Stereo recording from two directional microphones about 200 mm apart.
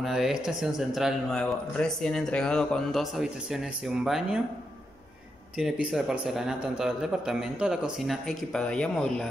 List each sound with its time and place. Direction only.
0.0 s speech: 5° right (ahead or behind)
5.6 s speech: 5° right (ahead or behind)